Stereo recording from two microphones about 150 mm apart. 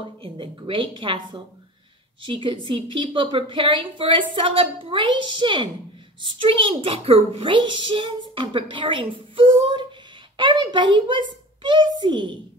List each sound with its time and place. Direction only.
0.2 s a woman's voice: 35° right (ahead or behind)